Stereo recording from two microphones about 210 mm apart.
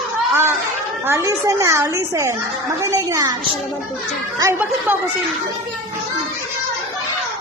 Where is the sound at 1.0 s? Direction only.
15° right (ahead or behind).